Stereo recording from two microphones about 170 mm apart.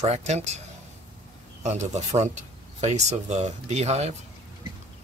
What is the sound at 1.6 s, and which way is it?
Speech, 40° right (ahead or behind).